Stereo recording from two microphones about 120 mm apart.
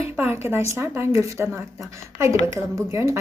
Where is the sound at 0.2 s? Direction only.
20° right (ahead or behind).